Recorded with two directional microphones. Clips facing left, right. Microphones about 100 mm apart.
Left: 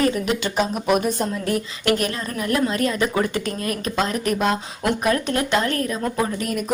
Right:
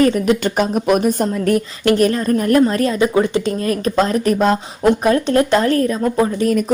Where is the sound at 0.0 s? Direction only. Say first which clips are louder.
Right 7 dB; 45° right (ahead or behind).